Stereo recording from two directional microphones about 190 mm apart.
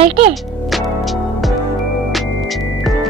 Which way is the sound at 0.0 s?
30° right (ahead or behind).